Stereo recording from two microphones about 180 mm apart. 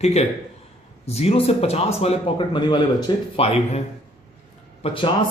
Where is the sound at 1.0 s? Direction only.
35° left (ahead or behind).